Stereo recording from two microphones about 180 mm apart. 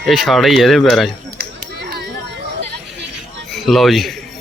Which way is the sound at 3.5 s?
Centre (ahead or behind).